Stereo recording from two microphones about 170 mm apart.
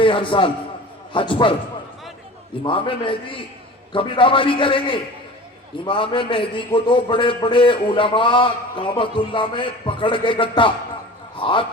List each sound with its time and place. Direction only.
0.0 s a man's voice: 30° left (ahead or behind)
2.6 s a man's voice: 30° left (ahead or behind)